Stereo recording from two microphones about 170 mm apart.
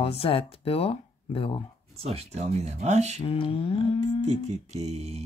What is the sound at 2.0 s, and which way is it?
Speech, 35° right (ahead or behind).